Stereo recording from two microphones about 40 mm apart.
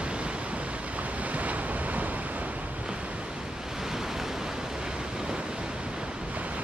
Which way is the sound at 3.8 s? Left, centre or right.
Centre.